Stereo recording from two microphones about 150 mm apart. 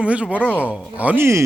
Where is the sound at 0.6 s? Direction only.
5° right (ahead or behind).